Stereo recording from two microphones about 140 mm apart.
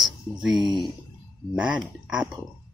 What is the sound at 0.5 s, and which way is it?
Speech, 30° right (ahead or behind).